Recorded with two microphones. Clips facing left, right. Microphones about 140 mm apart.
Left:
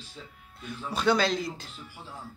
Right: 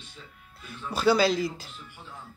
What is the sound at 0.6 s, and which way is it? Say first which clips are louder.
A woman's voice: right 2 dB; 5° right (ahead or behind).